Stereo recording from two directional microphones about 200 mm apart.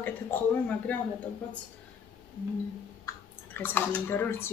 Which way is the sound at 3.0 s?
10° left (ahead or behind).